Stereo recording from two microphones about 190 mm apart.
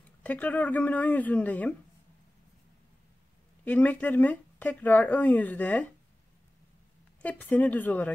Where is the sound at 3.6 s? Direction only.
10° left (ahead or behind).